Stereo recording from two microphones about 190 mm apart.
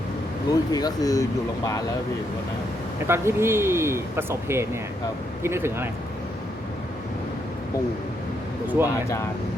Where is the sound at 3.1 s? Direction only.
15° right (ahead or behind).